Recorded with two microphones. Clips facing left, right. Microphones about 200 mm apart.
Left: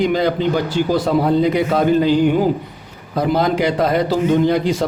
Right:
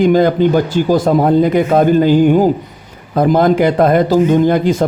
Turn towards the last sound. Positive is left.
turn(degrees=-50)  # may be behind; listen again after turning